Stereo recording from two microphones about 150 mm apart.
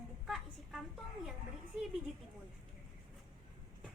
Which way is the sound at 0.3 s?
Centre (ahead or behind).